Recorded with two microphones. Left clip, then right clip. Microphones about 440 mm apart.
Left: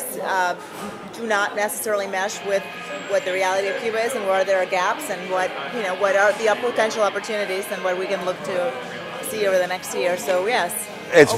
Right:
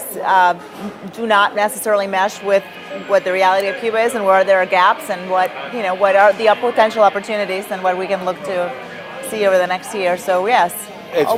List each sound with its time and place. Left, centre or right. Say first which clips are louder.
0.3 s a woman's voice: right 9 dB; right
11.1 s speech: left 2 dB; left